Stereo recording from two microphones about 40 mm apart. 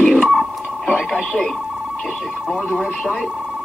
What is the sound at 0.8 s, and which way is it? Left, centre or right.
Speech, centre.